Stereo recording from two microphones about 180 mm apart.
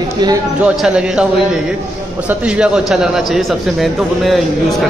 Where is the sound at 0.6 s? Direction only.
5° right (ahead or behind).